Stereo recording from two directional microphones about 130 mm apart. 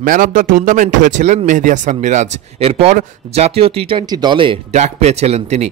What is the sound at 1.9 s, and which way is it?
Speech, 65° right (ahead or behind).